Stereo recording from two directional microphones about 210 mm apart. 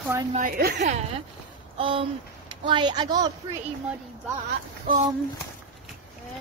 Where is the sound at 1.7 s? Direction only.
25° right (ahead or behind).